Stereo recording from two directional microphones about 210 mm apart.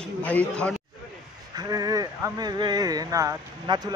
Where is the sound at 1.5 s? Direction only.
20° right (ahead or behind).